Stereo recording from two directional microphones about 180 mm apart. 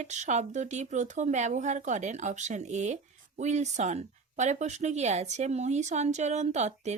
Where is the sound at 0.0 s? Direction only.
40° right (ahead or behind).